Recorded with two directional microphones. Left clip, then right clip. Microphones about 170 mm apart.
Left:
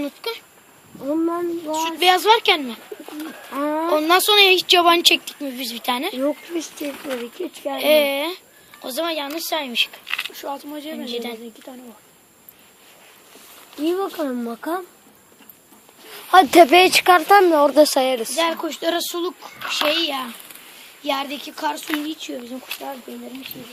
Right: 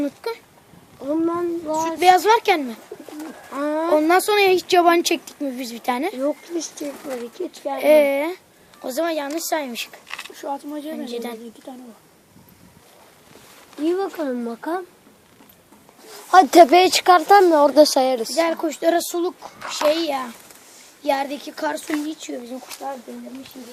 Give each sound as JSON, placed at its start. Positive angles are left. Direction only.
{"t": 0.0, "sound": "a woman's voice", "side_deg": -35}
{"t": 1.1, "sound": "a child's voice", "side_deg": 35}
{"t": 2.0, "sound": "a woman's voice", "side_deg": -30}
{"t": 3.5, "sound": "a child's voice", "side_deg": 30}
{"t": 3.9, "sound": "a woman's voice", "side_deg": -40}
{"t": 6.4, "sound": "speech", "side_deg": 20}
{"t": 7.8, "sound": "a woman's voice", "side_deg": -30}
{"t": 10.1, "sound": "a sound", "side_deg": 0}
{"t": 10.4, "sound": "speech", "side_deg": -50}
{"t": 10.9, "sound": "a woman's voice", "side_deg": -40}
{"t": 13.8, "sound": "speech", "side_deg": 15}
{"t": 16.1, "sound": "speech", "side_deg": -5}
{"t": 18.3, "sound": "a woman's voice", "side_deg": -35}